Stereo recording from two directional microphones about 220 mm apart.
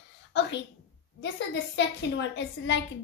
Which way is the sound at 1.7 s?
55° left (ahead or behind).